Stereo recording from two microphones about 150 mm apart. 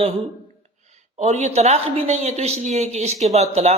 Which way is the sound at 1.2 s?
50° right (ahead or behind).